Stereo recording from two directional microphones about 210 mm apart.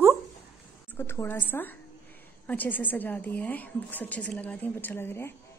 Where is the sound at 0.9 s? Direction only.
10° left (ahead or behind).